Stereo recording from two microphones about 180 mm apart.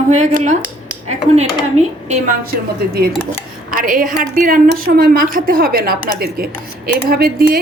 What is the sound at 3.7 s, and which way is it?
A woman's voice, 50° right (ahead or behind).